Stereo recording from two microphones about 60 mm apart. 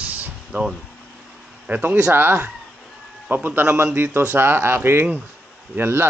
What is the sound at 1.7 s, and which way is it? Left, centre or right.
Speech, right.